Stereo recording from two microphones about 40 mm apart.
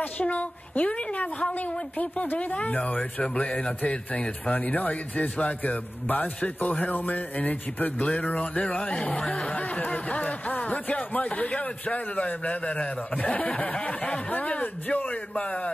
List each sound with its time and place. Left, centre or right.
0.0 s speech: left
9.2 s speech: centre
9.5 s speech: left